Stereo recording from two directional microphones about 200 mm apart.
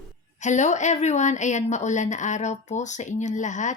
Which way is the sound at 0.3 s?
35° left (ahead or behind).